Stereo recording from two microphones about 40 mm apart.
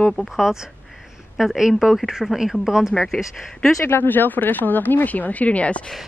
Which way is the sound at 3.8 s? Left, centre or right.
Left.